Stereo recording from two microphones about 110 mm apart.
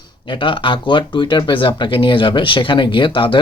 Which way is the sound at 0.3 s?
50° left (ahead or behind).